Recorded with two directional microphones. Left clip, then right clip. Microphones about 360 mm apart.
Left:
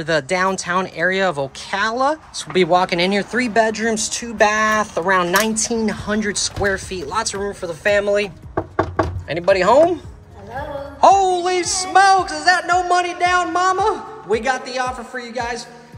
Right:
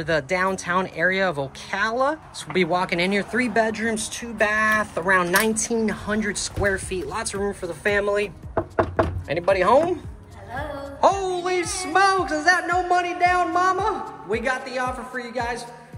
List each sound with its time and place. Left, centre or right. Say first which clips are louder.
0.0 s speech: left 4 dB; centre
9.3 s speech: left 4 dB; centre
11.0 s speech: left 8 dB; centre